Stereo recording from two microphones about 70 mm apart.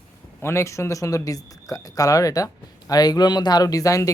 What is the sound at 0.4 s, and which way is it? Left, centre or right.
Speech, left.